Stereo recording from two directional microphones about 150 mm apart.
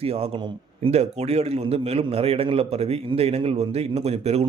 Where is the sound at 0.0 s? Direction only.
40° right (ahead or behind).